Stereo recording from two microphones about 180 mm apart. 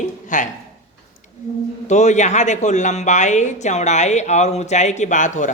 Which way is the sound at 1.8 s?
40° left (ahead or behind).